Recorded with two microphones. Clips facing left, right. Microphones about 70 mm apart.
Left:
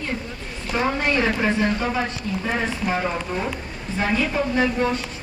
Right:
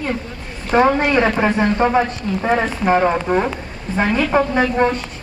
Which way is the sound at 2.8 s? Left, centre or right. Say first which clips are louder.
Right 9 dB; right.